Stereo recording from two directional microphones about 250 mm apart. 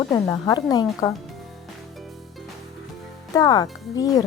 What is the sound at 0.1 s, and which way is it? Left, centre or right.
A woman's voice, centre.